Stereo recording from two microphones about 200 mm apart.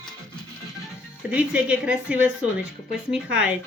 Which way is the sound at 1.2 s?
5° right (ahead or behind).